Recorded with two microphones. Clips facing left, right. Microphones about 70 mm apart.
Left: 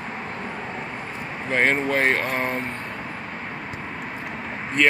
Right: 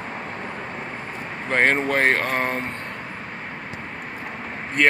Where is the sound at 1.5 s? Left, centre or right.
Right.